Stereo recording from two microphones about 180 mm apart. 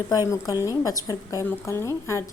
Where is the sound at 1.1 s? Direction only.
15° left (ahead or behind).